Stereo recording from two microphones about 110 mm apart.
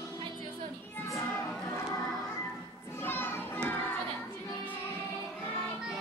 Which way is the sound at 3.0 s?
20° left (ahead or behind).